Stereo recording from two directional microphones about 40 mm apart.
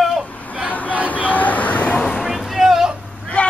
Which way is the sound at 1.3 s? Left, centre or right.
Left.